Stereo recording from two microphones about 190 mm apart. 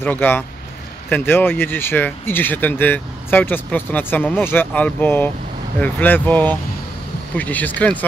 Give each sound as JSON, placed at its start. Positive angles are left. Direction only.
{"t": 0.0, "sound": "speech", "side_deg": 10}